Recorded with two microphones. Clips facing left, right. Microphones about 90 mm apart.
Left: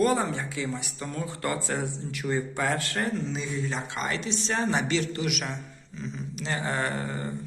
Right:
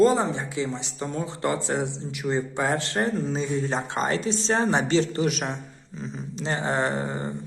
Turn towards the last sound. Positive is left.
turn(degrees=-25)  # may be behind; listen again after turning